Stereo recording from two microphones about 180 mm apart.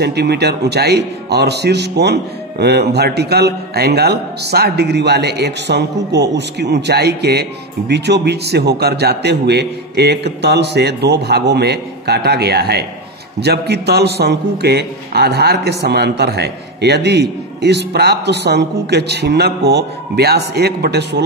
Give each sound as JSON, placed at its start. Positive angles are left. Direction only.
{"t": 0.0, "sound": "a man's voice", "side_deg": -65}